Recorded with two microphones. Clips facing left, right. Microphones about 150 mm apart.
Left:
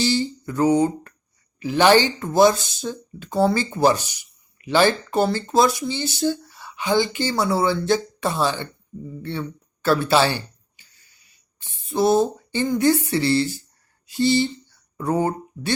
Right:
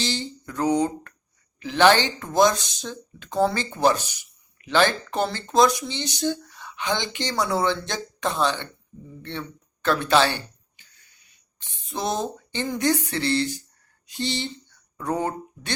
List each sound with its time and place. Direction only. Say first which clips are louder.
0.0 s a sound: left 7 dB; 10° left (ahead or behind)
1.5 s speech: left 2 dB; 10° left (ahead or behind)
9.8 s speech: left 2 dB; 5° left (ahead or behind)
11.6 s speech: left 9 dB; 5° left (ahead or behind)